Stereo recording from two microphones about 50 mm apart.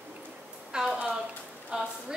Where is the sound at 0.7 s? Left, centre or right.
Centre.